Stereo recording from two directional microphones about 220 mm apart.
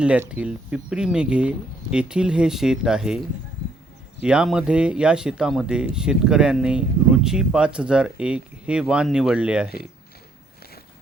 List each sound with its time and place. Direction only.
0.0 s speech: 5° right (ahead or behind)